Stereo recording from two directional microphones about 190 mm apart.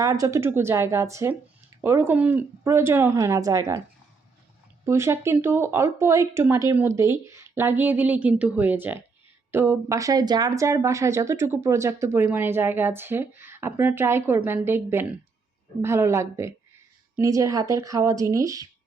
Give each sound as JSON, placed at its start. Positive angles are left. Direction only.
{"t": 0.0, "sound": "speech", "side_deg": -20}
{"t": 4.9, "sound": "speech", "side_deg": -15}